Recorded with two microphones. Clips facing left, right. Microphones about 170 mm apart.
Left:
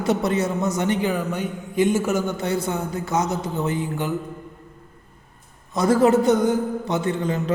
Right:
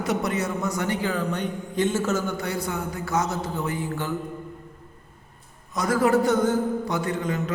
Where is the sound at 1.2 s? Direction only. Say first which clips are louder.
Left 1 dB; 10° left (ahead or behind).